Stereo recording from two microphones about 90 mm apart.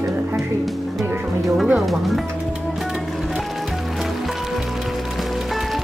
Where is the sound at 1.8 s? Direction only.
Centre (ahead or behind).